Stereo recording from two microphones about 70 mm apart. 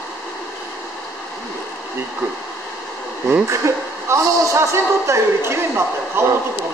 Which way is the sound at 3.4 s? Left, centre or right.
Right.